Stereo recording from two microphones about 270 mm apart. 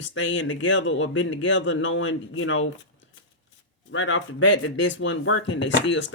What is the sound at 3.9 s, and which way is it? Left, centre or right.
Speech, left.